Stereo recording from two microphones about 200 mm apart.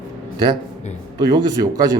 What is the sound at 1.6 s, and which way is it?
Speech, 20° right (ahead or behind).